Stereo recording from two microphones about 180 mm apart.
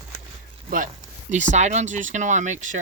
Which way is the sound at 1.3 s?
40° right (ahead or behind).